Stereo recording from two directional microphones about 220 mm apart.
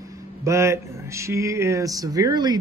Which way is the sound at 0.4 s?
15° right (ahead or behind).